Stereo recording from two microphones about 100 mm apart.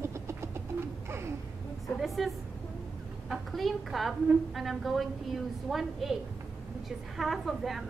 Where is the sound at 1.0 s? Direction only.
25° right (ahead or behind).